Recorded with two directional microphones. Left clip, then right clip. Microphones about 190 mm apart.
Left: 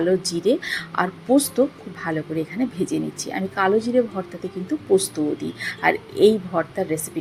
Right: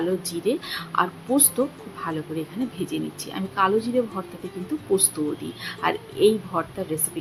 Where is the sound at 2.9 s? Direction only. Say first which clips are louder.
Left 4 dB; 15° left (ahead or behind).